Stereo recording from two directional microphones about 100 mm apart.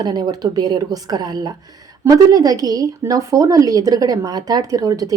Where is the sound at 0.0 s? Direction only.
45° right (ahead or behind).